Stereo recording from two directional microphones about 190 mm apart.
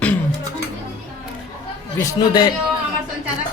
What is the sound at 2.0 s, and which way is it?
Speech, 20° left (ahead or behind).